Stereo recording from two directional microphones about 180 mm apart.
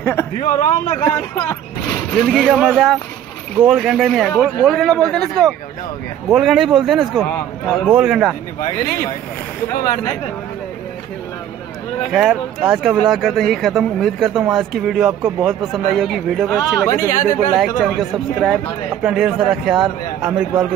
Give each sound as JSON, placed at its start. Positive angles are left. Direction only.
{"t": 0.0, "sound": "a man's voice", "side_deg": 15}
{"t": 0.4, "sound": "a man's voice", "side_deg": 45}
{"t": 1.0, "sound": "speech", "side_deg": 10}
{"t": 2.1, "sound": "speech", "side_deg": 0}
{"t": 12.1, "sound": "speech", "side_deg": -5}
{"t": 16.9, "sound": "a man's voice", "side_deg": 50}
{"t": 17.6, "sound": "speech", "side_deg": 0}